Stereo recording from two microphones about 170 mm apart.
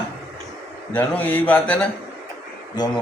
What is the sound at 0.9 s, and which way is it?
Speech, 10° left (ahead or behind).